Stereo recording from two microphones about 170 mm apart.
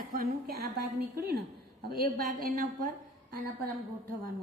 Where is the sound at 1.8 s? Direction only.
60° right (ahead or behind).